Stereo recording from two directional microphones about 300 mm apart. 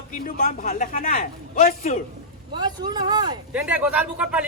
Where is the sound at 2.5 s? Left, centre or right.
Centre.